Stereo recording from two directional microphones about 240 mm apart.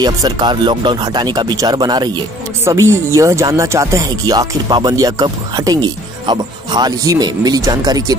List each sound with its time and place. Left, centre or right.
0.0 s speech: centre